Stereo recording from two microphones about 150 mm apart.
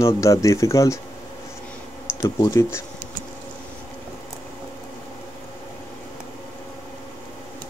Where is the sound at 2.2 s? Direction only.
20° left (ahead or behind).